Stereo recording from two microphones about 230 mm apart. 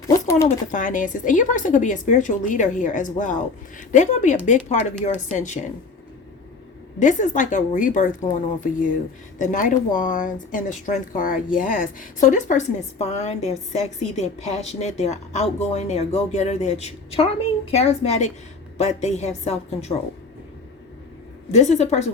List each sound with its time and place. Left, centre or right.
0.1 s a sound: centre
0.4 s speech: left
7.0 s speech: left
9.4 s a woman's voice: left
21.5 s a woman's voice: left